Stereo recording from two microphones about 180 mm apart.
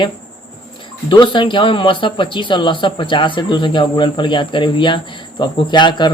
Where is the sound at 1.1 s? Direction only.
25° left (ahead or behind).